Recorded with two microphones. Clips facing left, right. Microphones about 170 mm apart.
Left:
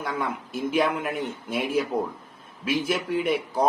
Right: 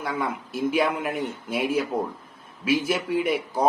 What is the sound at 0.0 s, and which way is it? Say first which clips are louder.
Speech: right 1 dB; centre (ahead or behind).